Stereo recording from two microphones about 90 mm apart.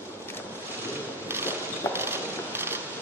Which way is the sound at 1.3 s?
25° right (ahead or behind).